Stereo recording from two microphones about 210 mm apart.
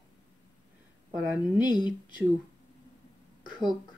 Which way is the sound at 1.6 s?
20° left (ahead or behind).